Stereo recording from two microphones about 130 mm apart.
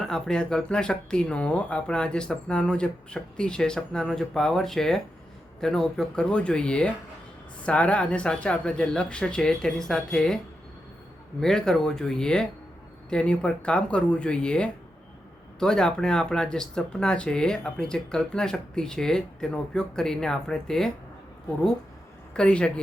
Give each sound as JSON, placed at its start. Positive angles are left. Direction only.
{"t": 0.0, "sound": "speech", "side_deg": 5}
{"t": 22.4, "sound": "speech", "side_deg": 5}